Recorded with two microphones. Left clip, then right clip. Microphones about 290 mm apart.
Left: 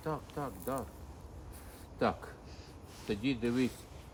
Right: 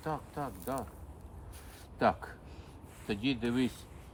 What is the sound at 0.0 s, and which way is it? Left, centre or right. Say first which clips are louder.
Speech: right 1 dB; centre.